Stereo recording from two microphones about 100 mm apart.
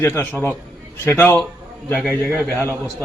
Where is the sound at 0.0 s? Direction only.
25° left (ahead or behind).